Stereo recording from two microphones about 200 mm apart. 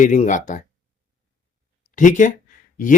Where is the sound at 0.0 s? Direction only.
40° left (ahead or behind).